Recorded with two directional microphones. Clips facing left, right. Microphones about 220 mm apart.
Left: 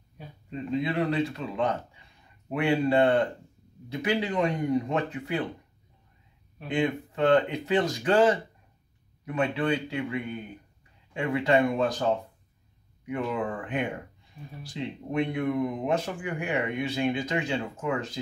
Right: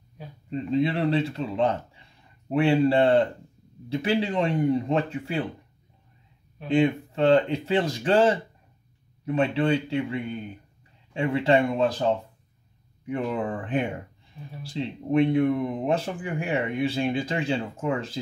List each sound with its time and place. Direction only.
0.5 s speech: 30° right (ahead or behind)
6.7 s speech: 30° right (ahead or behind)
13.0 s speech: 30° right (ahead or behind)